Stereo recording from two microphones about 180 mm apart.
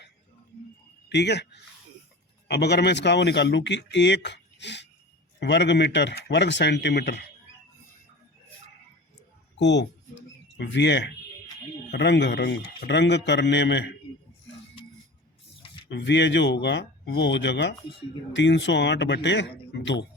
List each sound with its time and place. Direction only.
1.1 s speech: 70° left (ahead or behind)
9.6 s speech: 70° left (ahead or behind)
15.9 s speech: 75° left (ahead or behind)